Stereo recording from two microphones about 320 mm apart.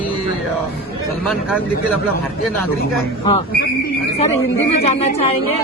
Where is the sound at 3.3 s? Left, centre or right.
Centre.